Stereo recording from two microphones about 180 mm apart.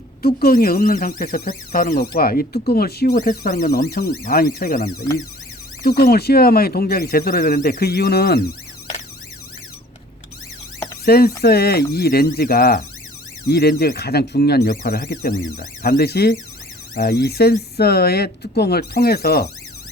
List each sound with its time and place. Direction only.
0.2 s speech: 55° left (ahead or behind)
11.0 s speech: 60° left (ahead or behind)